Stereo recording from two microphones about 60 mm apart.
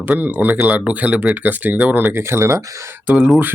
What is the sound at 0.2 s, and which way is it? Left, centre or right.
Speech, right.